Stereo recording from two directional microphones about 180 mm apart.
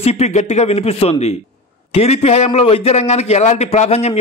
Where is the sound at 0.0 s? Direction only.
35° left (ahead or behind).